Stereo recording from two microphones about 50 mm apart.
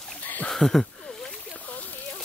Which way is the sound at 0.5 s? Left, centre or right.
Centre.